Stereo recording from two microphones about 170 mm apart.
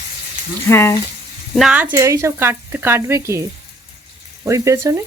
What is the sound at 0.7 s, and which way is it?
Speech, 15° left (ahead or behind).